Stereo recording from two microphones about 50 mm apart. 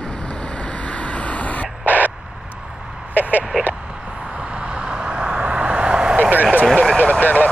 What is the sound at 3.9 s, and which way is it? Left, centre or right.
Vehicle, centre.